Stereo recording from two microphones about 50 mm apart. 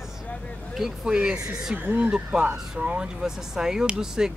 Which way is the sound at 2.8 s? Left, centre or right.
Right.